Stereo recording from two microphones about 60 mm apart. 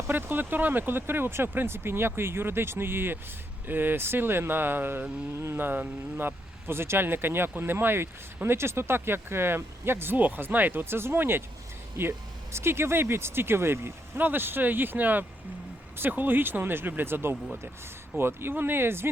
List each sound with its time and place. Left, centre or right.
0.1 s speech: right